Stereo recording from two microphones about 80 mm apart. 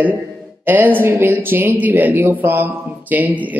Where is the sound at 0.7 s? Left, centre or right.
Right.